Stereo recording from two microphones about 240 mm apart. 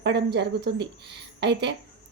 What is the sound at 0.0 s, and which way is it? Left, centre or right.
Speech, right.